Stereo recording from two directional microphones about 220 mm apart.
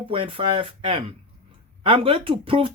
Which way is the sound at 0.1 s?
25° right (ahead or behind).